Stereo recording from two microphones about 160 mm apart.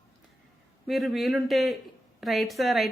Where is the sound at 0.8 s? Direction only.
Centre (ahead or behind).